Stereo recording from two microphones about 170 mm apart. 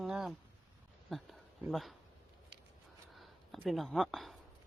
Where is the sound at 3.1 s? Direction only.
Centre (ahead or behind).